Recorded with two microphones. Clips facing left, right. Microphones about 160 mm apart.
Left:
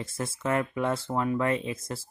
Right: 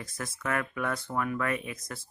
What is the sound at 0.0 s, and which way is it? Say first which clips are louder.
Speech: left 5 dB; 25° left (ahead or behind).